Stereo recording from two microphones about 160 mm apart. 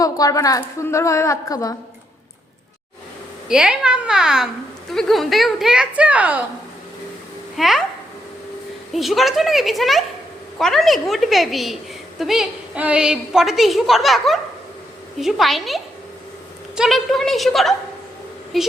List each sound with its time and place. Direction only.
0.0 s a woman's voice: 20° left (ahead or behind)
3.5 s a woman's voice: 5° right (ahead or behind)
7.5 s a child's voice: centre (ahead or behind)
8.9 s a woman's voice: centre (ahead or behind)